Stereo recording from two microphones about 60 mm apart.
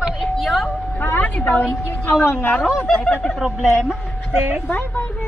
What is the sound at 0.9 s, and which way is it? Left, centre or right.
Vehicle, left.